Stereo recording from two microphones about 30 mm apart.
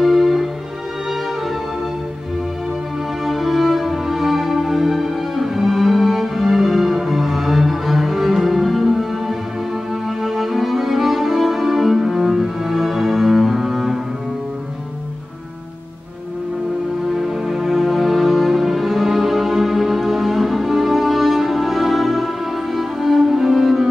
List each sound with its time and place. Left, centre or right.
0.0 s music: centre
3.3 s music: centre
17.1 s music: centre